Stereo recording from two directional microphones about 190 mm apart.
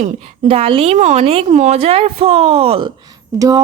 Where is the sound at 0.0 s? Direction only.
30° right (ahead or behind).